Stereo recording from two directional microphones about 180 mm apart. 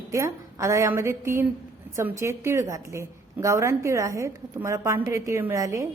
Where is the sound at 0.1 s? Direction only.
15° right (ahead or behind).